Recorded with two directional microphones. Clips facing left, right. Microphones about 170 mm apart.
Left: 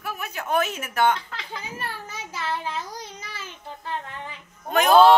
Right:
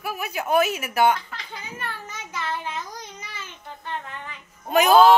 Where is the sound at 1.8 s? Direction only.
30° left (ahead or behind).